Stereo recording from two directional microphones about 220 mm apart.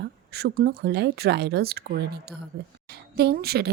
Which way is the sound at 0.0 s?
45° right (ahead or behind).